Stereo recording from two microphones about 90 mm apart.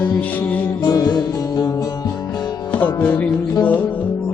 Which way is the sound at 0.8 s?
50° left (ahead or behind).